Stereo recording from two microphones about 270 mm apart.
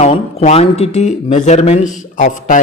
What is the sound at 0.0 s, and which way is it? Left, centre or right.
Speech, left.